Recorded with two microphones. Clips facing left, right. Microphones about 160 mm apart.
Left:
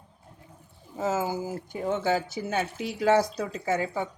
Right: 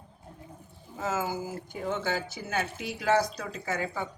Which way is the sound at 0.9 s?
35° left (ahead or behind).